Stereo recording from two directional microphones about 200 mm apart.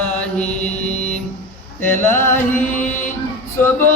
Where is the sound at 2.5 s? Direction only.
40° left (ahead or behind).